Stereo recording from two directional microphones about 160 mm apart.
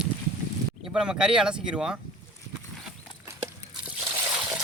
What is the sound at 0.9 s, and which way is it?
Speech, 5° right (ahead or behind).